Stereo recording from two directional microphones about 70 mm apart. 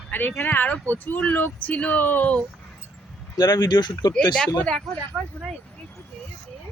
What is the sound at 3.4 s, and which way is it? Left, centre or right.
Speech, left.